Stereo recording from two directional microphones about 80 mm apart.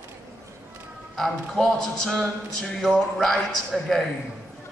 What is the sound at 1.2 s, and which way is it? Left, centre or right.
A man's voice, centre.